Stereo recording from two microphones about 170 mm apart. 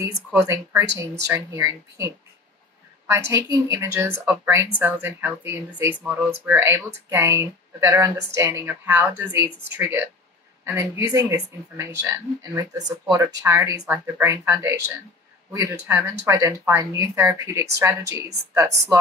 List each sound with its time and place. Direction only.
0.0 s speech: 15° right (ahead or behind)
3.4 s speech: 15° right (ahead or behind)